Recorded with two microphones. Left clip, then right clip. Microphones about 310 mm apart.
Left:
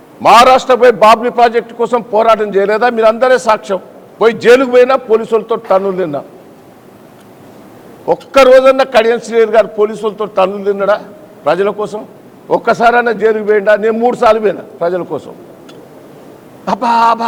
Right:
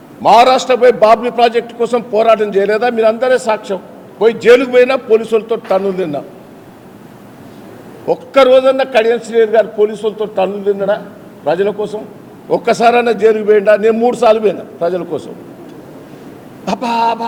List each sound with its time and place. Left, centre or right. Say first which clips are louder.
0.2 s a man's voice: left 2 dB; left
8.0 s a man's voice: left 2 dB; left
16.6 s a man's voice: left 4 dB; left